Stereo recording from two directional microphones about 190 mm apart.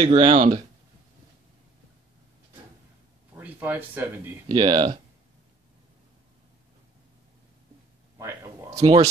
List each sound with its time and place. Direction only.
0.0 s speech: 30° right (ahead or behind)
3.3 s speech: 10° right (ahead or behind)
4.5 s speech: 25° right (ahead or behind)
8.2 s a sound: 15° right (ahead or behind)
8.8 s speech: 30° right (ahead or behind)